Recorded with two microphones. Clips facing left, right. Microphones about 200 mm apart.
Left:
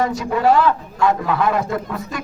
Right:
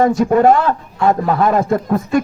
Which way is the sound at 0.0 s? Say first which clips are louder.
Right 7 dB; 50° right (ahead or behind).